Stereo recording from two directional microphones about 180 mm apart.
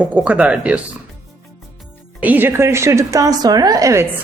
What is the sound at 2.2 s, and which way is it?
A woman's voice, 10° right (ahead or behind).